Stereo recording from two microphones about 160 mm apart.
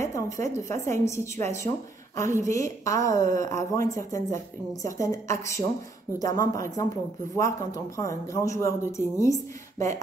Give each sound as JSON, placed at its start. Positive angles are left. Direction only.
{"t": 0.0, "sound": "a woman's voice", "side_deg": 20}